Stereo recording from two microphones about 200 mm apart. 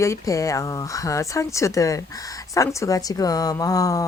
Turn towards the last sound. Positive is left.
turn(degrees=15)  # may be behind; listen again after turning